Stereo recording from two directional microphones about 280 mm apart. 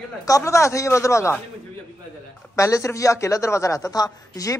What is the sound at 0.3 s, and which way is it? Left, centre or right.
A woman's voice, centre.